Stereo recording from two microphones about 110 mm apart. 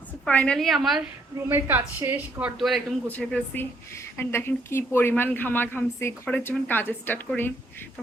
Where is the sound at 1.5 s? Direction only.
20° right (ahead or behind).